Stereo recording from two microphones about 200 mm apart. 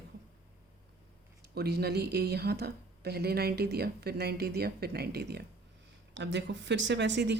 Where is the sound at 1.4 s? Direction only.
55° right (ahead or behind).